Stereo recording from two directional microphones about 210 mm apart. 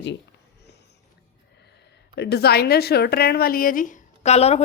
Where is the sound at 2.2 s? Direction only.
50° left (ahead or behind).